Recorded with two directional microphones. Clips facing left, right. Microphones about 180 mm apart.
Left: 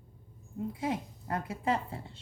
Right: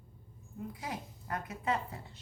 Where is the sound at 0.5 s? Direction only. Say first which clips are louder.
Left 7 dB; 25° left (ahead or behind).